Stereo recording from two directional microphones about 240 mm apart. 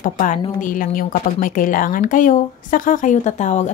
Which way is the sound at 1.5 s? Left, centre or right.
Left.